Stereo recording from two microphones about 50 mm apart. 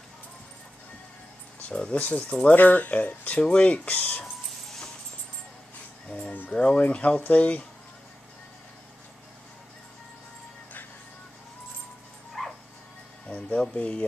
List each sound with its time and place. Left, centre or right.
1.7 s speech: centre
2.0 s speech: left
6.1 s speech: left
6.5 s speech: left
12.3 s dog: centre
13.3 s speech: left